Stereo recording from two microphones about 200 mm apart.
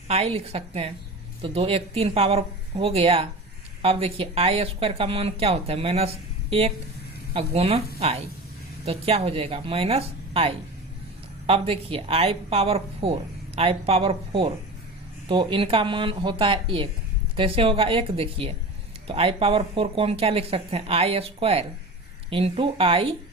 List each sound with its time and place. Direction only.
0.1 s speech: 30° right (ahead or behind)